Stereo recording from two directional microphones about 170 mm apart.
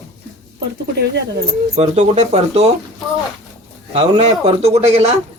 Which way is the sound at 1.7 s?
40° right (ahead or behind).